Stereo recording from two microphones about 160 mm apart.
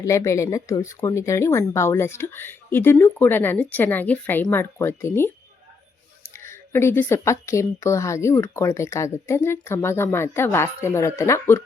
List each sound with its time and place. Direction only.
0.0 s speech: 20° left (ahead or behind)
6.3 s speech: 15° left (ahead or behind)